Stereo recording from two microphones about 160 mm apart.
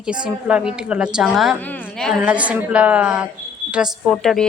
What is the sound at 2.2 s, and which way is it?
A woman's voice, 10° right (ahead or behind).